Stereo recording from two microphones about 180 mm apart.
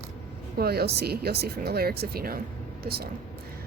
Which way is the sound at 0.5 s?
60° right (ahead or behind).